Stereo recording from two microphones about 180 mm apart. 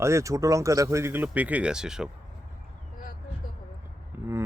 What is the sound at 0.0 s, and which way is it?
Speech, 15° right (ahead or behind).